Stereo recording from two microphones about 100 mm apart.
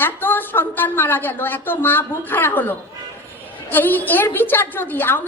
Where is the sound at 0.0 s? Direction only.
20° left (ahead or behind).